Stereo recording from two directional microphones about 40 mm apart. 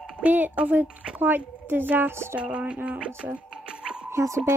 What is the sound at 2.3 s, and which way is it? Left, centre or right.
Speech, right.